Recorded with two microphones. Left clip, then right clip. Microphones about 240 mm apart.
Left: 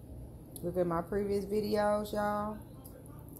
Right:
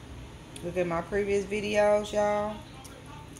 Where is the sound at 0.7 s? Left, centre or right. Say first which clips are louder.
Right 4 dB; centre.